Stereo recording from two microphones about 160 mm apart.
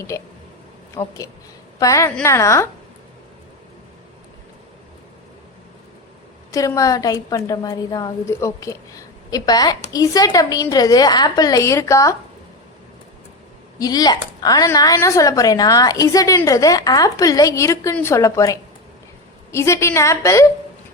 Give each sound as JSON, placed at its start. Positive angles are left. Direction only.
{"t": 0.1, "sound": "a woman's voice", "side_deg": 20}
{"t": 6.5, "sound": "speech", "side_deg": 20}
{"t": 13.7, "sound": "a woman's voice", "side_deg": 25}